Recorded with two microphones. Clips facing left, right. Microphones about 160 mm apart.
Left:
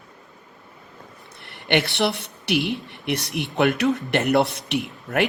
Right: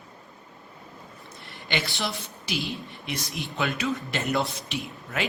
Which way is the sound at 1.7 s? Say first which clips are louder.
Left 9 dB; 65° left (ahead or behind).